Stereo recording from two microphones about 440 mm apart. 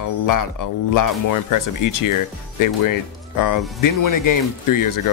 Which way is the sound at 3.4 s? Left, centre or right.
Left.